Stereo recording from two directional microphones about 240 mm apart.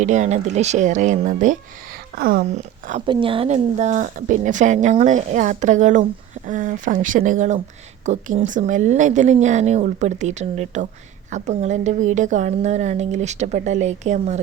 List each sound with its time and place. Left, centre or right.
0.0 s a woman's voice: right
3.1 s a woman's voice: right